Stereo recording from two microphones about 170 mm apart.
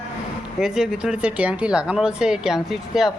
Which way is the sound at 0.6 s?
5° right (ahead or behind).